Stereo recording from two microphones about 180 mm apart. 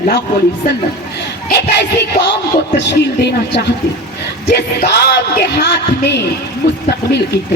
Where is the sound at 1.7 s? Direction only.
70° left (ahead or behind).